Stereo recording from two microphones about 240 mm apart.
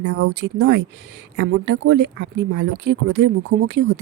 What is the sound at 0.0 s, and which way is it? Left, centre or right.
Speech, right.